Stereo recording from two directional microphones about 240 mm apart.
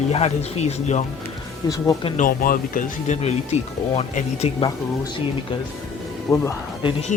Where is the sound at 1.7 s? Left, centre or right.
Centre.